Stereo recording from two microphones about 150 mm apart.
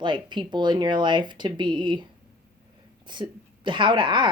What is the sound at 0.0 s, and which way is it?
Speech, 30° right (ahead or behind).